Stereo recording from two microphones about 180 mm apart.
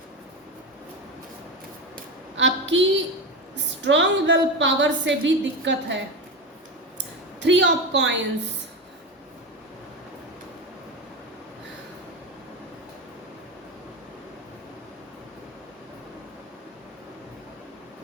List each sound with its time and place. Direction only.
2.3 s a woman's voice: 90° right
7.4 s a woman's voice: 85° right